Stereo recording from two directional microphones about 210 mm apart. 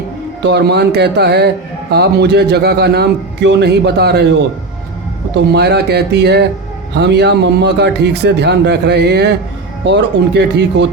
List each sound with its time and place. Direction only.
0.4 s a man's voice: 55° right (ahead or behind)
5.5 s a man's voice: 50° right (ahead or behind)